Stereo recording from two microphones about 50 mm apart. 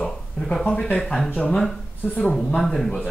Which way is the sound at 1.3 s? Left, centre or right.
Left.